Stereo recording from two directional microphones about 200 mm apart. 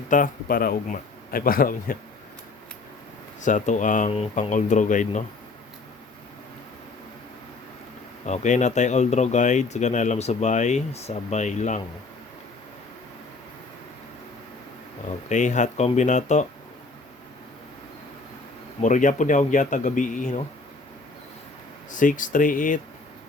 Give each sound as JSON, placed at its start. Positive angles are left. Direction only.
{"t": 0.1, "sound": "speech", "side_deg": 45}
{"t": 3.4, "sound": "speech", "side_deg": 40}
{"t": 8.3, "sound": "speech", "side_deg": 35}
{"t": 15.3, "sound": "speech", "side_deg": 35}
{"t": 18.8, "sound": "speech", "side_deg": 40}
{"t": 21.9, "sound": "speech", "side_deg": 40}